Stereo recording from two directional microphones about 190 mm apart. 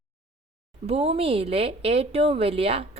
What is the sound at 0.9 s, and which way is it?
A woman's voice, 30° right (ahead or behind).